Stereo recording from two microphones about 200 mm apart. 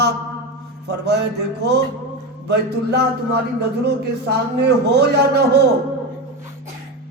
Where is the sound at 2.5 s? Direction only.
55° right (ahead or behind).